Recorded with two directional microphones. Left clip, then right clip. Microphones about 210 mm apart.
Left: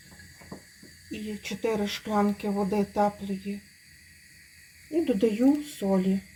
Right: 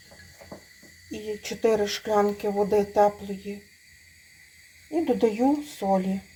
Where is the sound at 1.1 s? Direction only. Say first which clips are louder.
Right 4 dB; 15° right (ahead or behind).